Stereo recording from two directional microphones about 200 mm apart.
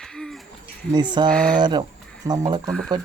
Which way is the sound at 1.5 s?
20° right (ahead or behind).